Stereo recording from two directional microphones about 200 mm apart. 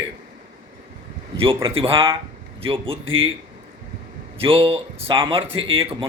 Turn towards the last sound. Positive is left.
turn(degrees=-25)  # may be behind; listen again after turning